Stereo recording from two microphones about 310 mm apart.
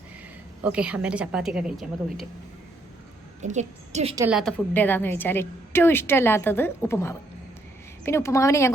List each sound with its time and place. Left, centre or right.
0.6 s a woman's voice: centre
3.4 s a woman's voice: right
4.1 s a woman's voice: centre